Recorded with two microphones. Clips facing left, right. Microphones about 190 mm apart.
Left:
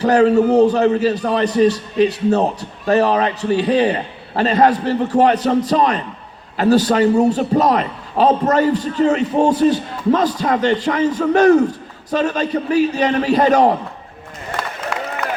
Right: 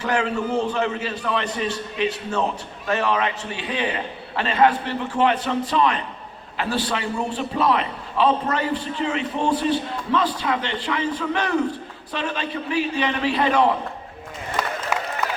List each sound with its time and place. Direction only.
0.0 s a man's voice: 40° left (ahead or behind)